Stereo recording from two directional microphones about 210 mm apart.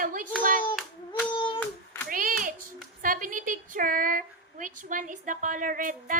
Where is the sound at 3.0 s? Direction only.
40° right (ahead or behind).